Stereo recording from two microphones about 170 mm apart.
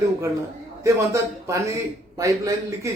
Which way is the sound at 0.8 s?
15° right (ahead or behind).